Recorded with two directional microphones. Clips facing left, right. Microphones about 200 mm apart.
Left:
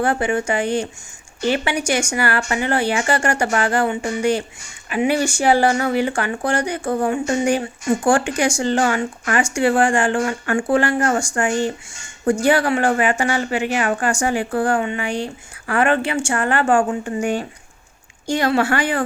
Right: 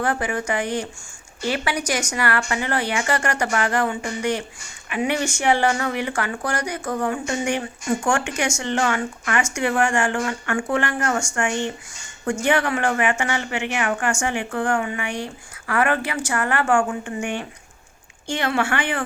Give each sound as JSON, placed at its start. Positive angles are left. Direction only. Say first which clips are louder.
{"t": 0.0, "sound": "speech", "louder": "left 4 dB", "side_deg": 30}